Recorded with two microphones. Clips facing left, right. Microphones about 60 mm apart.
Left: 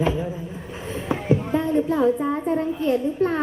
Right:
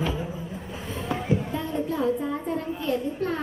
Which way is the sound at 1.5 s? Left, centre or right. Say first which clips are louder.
Left 7 dB; left.